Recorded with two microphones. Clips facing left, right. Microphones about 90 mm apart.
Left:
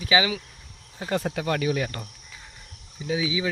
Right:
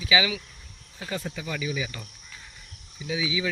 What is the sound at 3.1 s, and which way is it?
Speech, 30° left (ahead or behind).